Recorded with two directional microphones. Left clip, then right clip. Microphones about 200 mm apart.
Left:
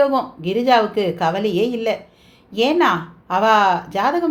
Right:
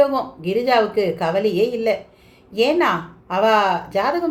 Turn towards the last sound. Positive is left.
turn(degrees=40)  # may be behind; listen again after turning